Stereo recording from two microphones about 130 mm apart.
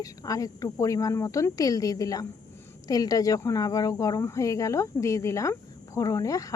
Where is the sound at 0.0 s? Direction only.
25° left (ahead or behind).